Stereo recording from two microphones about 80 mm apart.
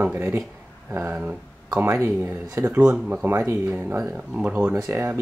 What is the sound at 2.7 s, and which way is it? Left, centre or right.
Speech, centre.